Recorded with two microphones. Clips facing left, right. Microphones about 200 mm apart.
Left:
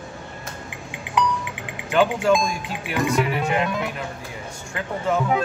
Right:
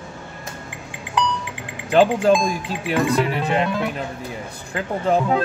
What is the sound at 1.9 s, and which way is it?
Speech, 35° right (ahead or behind).